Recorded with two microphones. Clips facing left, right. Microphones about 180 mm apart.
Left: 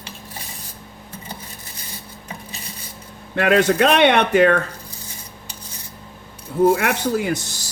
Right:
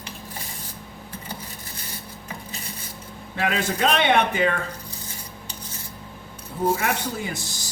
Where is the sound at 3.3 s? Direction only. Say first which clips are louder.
Left 9 dB; 70° left (ahead or behind).